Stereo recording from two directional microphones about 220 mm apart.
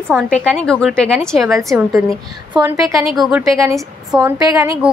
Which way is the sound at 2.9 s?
Centre (ahead or behind).